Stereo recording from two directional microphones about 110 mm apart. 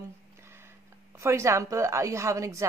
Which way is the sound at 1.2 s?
25° right (ahead or behind).